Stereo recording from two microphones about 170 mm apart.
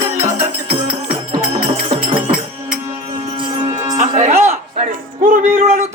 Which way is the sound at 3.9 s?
45° right (ahead or behind).